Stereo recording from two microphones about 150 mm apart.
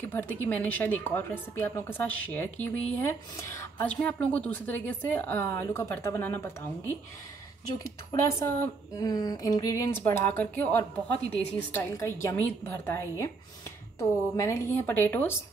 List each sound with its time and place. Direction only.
0.0 s a woman's voice: 10° left (ahead or behind)
9.0 s a woman's voice: 25° left (ahead or behind)